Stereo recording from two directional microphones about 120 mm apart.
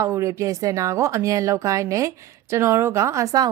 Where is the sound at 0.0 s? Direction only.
25° right (ahead or behind).